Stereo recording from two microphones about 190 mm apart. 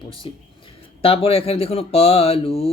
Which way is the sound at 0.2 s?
30° left (ahead or behind).